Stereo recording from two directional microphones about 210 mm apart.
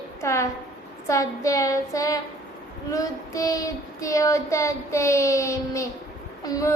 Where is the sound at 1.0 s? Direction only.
15° left (ahead or behind).